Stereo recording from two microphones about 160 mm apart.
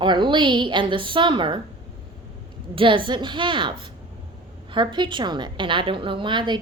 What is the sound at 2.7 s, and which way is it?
A woman's voice, 30° right (ahead or behind).